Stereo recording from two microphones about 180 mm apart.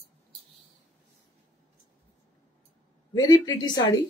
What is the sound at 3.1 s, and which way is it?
Speech, 20° left (ahead or behind).